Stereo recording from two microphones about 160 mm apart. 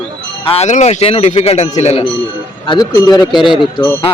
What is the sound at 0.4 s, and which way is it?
Speech, 40° left (ahead or behind).